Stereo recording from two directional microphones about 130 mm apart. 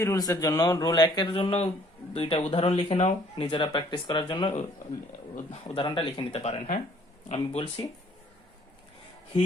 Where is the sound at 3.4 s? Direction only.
35° left (ahead or behind).